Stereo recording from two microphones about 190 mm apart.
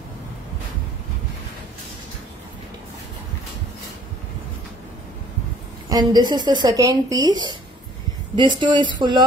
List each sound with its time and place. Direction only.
5.9 s speech: 20° right (ahead or behind)